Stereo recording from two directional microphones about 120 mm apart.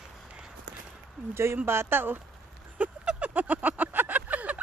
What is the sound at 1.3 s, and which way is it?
Speech, 20° right (ahead or behind).